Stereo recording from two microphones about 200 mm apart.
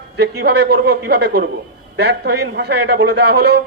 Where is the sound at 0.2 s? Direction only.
55° right (ahead or behind).